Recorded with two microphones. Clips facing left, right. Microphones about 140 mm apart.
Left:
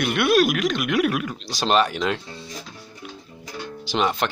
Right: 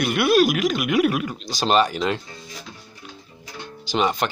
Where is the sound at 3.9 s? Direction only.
Centre (ahead or behind).